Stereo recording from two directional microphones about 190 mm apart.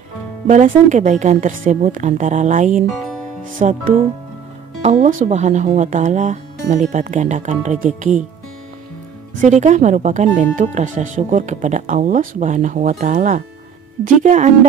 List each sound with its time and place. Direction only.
0.5 s speech: 40° right (ahead or behind)
9.4 s speech: 40° right (ahead or behind)